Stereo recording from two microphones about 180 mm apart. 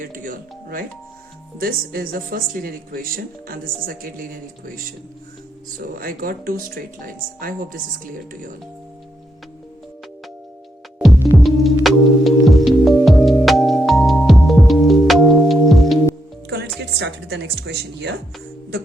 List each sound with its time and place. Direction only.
0.0 s speech: 50° right (ahead or behind)
6.0 s speech: 55° right (ahead or behind)
11.0 s music: centre (ahead or behind)
16.5 s a woman's voice: 65° right (ahead or behind)